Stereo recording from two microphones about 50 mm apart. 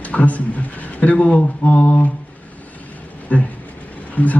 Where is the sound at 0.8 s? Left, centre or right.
Left.